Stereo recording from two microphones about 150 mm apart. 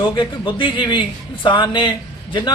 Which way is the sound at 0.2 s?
35° left (ahead or behind).